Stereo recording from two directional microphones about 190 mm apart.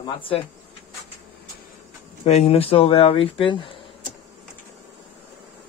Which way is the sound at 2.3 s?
30° left (ahead or behind).